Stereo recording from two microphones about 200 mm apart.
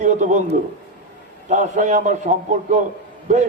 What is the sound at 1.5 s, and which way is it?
A man's voice, 40° right (ahead or behind).